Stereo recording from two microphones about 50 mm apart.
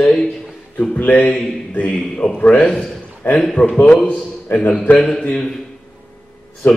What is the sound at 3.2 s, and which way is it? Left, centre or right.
Speech, left.